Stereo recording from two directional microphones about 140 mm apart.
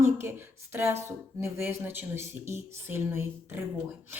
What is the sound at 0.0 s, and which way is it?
A woman's voice, 15° right (ahead or behind).